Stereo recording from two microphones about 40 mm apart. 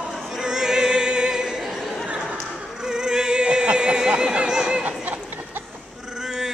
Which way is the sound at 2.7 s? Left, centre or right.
Centre.